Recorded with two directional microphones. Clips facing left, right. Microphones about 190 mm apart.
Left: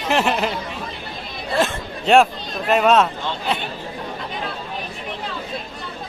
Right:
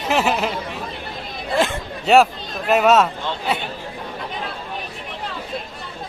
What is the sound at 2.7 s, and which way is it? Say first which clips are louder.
Speech: right 1 dB; 5° right (ahead or behind).